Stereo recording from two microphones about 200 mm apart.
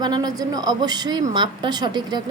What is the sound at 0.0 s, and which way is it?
A woman's voice, 20° right (ahead or behind).